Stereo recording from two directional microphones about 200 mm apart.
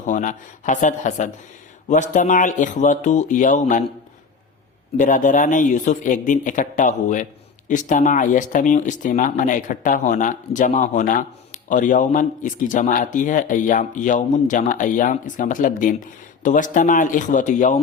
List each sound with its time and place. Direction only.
0.0 s speech: 40° left (ahead or behind)
4.9 s speech: 40° left (ahead or behind)